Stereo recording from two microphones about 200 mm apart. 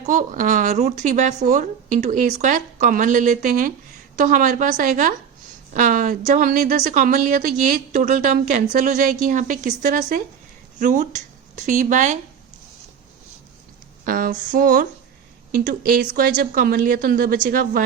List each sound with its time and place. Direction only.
0.0 s a woman's voice: 40° right (ahead or behind)
14.0 s speech: 45° right (ahead or behind)